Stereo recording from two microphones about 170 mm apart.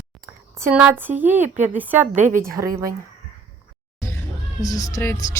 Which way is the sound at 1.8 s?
10° right (ahead or behind).